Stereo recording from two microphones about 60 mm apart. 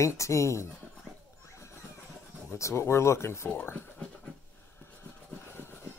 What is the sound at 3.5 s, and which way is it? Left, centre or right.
Speech, left.